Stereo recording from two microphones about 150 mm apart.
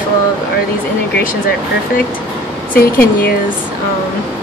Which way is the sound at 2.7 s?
85° left.